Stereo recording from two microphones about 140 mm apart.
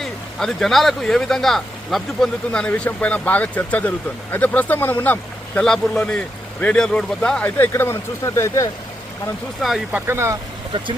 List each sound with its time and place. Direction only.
0.0 s speech: 5° left (ahead or behind); by 8.7 s 20° left (ahead or behind)
9.6 s speech: centre (ahead or behind)
10.1 s speech: 20° right (ahead or behind)